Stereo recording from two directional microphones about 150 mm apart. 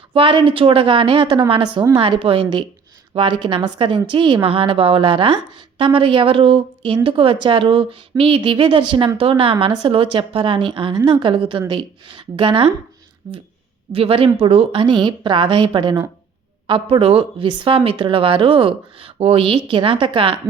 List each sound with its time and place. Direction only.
0.1 s a woman's voice: 35° right (ahead or behind)